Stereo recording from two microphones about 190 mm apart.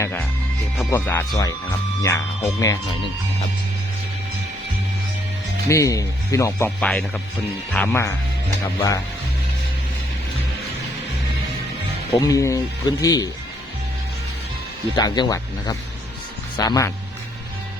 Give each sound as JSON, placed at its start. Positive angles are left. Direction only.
{"t": 0.0, "sound": "speech", "side_deg": 10}
{"t": 5.6, "sound": "speech", "side_deg": 15}
{"t": 6.7, "sound": "speech", "side_deg": 5}
{"t": 12.2, "sound": "speech", "side_deg": 15}
{"t": 14.9, "sound": "speech", "side_deg": 20}